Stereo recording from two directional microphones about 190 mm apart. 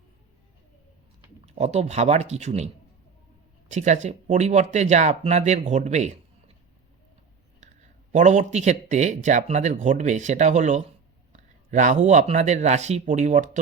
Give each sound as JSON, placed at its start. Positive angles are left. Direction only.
{"t": 1.5, "sound": "speech", "side_deg": -35}
{"t": 3.7, "sound": "speech", "side_deg": -40}
{"t": 8.1, "sound": "speech", "side_deg": -40}